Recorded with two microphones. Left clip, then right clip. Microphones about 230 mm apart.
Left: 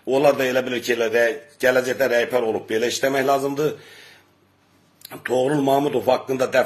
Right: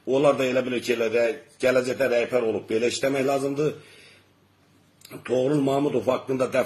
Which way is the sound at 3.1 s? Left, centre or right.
Left.